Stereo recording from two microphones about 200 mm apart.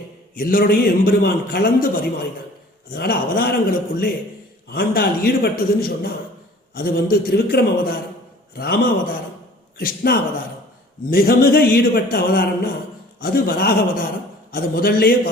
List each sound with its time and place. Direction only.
0.3 s a man's voice: 45° left (ahead or behind)